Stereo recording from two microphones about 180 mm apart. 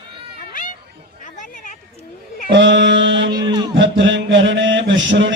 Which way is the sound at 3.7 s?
90° right.